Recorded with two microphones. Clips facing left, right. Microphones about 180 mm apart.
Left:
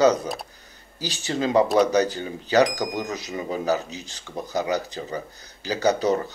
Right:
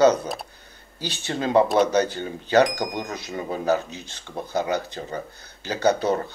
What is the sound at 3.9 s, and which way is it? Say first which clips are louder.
Speech: even; 40° left (ahead or behind).